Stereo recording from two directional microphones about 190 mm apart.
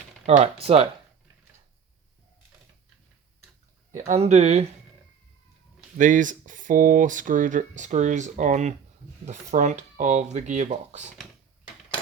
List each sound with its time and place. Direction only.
0.3 s speech: 30° right (ahead or behind)
3.9 s speech: 35° right (ahead or behind)
6.0 s speech: 45° right (ahead or behind)